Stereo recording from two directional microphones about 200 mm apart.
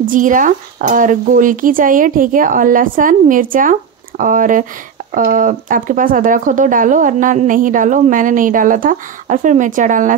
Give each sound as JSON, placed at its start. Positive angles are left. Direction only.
{"t": 0.0, "sound": "speech", "side_deg": -40}